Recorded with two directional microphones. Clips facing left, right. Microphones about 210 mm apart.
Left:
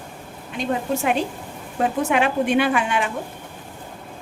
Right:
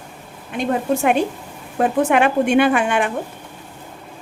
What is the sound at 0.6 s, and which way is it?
A woman's voice, 55° right (ahead or behind).